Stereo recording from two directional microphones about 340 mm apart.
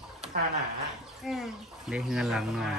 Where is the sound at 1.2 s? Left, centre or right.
Centre.